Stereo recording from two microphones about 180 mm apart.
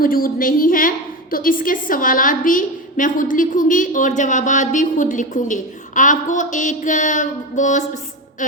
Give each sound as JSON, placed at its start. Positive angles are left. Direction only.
{"t": 0.0, "sound": "a woman's voice", "side_deg": 55}